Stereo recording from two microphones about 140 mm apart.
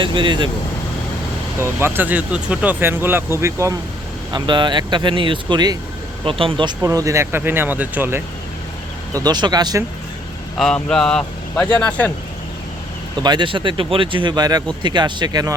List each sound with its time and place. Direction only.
0.0 s speech: 35° right (ahead or behind)
1.5 s speech: 15° right (ahead or behind)
4.3 s speech: 35° right (ahead or behind)
6.8 s speech: 20° right (ahead or behind)
9.1 s speech: 30° right (ahead or behind)
10.6 s speech: 5° left (ahead or behind)
13.2 s speech: 35° right (ahead or behind)